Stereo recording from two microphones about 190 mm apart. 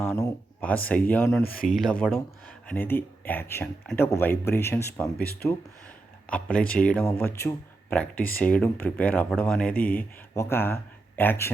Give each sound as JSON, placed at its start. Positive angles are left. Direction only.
{"t": 0.0, "sound": "a sound", "side_deg": 15}
{"t": 1.4, "sound": "speech", "side_deg": 55}
{"t": 1.6, "sound": "speech", "side_deg": 0}
{"t": 5.2, "sound": "speech", "side_deg": 55}
{"t": 6.2, "sound": "speech", "side_deg": 5}